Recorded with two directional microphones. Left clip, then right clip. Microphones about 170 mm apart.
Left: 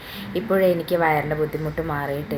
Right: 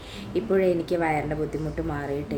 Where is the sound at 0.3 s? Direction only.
15° right (ahead or behind).